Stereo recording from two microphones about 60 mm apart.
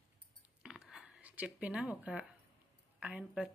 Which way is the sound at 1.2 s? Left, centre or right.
Right.